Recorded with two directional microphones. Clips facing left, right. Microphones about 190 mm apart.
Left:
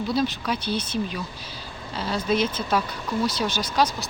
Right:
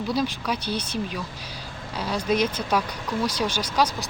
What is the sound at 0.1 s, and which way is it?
Speech, 10° right (ahead or behind).